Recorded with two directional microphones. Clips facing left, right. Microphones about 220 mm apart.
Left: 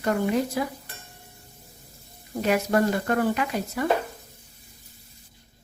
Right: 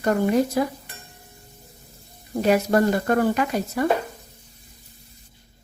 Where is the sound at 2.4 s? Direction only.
40° right (ahead or behind).